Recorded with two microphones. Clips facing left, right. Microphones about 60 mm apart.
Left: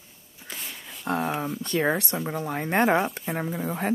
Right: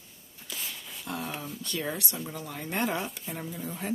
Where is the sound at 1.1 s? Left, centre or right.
Left.